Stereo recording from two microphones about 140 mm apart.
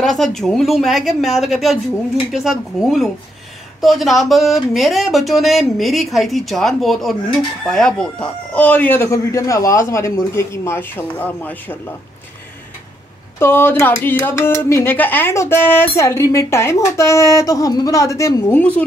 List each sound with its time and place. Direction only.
0.0 s speech: centre (ahead or behind)
13.4 s speech: 15° left (ahead or behind)
18.6 s speech: 10° left (ahead or behind)